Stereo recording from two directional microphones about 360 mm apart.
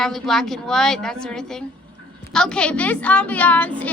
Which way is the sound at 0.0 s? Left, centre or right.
Centre.